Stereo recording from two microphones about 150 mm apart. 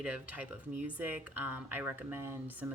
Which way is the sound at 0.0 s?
10° right (ahead or behind).